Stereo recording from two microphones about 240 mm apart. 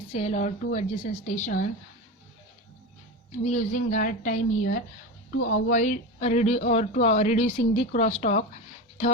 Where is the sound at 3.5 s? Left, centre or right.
Left.